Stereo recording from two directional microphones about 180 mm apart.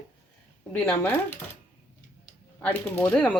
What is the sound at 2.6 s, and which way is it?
Speech, 10° left (ahead or behind).